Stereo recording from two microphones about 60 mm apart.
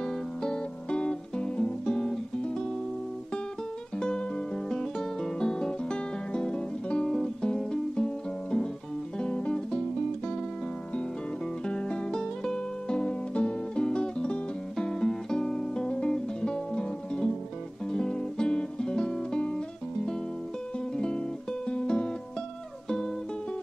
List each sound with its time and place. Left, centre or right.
0.0 s music: centre
4.6 s music: centre
11.6 s music: centre
20.9 s music: centre